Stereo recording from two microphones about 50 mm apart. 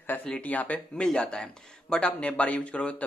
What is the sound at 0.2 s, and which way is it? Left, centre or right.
Speech, left.